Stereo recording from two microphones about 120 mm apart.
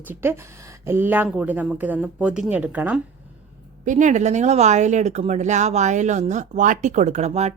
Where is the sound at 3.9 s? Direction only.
90° right.